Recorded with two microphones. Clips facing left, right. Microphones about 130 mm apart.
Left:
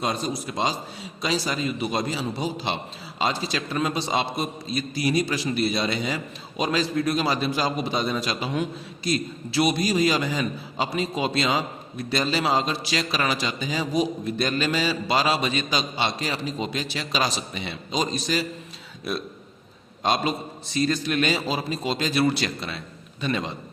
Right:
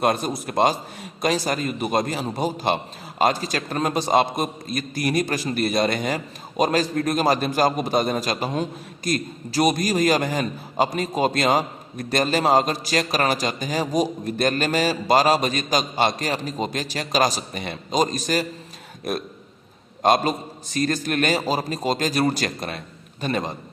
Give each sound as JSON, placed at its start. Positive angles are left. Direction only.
{"t": 0.0, "sound": "a man's voice", "side_deg": -50}
{"t": 20.0, "sound": "a man's voice", "side_deg": -50}